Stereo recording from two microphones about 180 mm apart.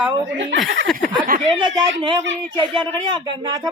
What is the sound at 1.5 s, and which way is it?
Speech, 25° right (ahead or behind).